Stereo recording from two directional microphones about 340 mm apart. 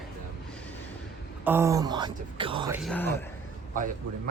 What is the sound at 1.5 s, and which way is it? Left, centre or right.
Speech, centre.